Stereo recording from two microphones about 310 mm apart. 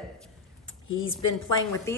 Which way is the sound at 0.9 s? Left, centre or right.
Left.